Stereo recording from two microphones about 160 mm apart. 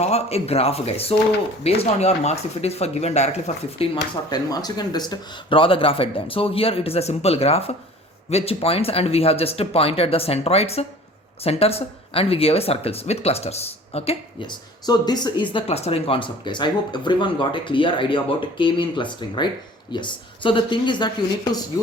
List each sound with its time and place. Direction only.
0.0 s speech: 40° left (ahead or behind)
3.9 s speech: 25° left (ahead or behind)
15.5 s speech: 40° left (ahead or behind)